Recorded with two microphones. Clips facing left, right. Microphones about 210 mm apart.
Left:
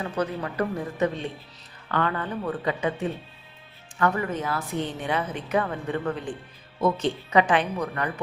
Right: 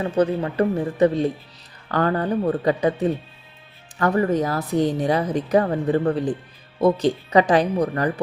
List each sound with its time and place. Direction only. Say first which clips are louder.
0.0 s a woman's voice: right 8 dB; 30° right (ahead or behind)